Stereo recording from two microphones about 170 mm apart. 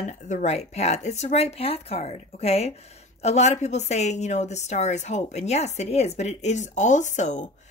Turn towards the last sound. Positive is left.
turn(degrees=45)  # may be behind; listen again after turning